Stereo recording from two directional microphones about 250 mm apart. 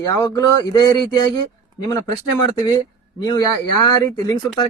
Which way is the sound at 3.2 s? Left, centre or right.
Centre.